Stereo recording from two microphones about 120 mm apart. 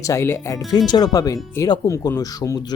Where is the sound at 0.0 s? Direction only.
25° left (ahead or behind).